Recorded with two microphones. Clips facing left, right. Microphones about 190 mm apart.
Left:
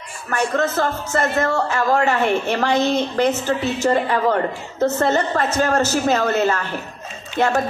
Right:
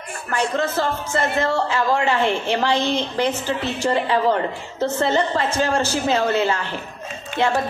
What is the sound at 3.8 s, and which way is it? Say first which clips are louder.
Speech: even; 45° left (ahead or behind).